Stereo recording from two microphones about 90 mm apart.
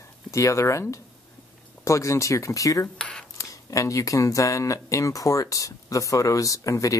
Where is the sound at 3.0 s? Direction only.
10° left (ahead or behind).